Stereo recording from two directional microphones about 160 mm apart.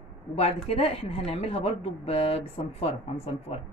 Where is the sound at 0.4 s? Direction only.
35° left (ahead or behind).